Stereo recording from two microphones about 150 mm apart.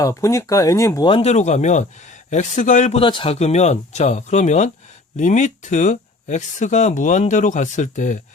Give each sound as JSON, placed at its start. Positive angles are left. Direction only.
{"t": 0.0, "sound": "speech", "side_deg": 20}
{"t": 1.0, "sound": "speech", "side_deg": 40}
{"t": 3.0, "sound": "speech", "side_deg": 35}